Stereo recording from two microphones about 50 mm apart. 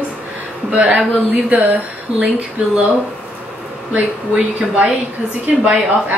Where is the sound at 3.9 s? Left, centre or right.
Right.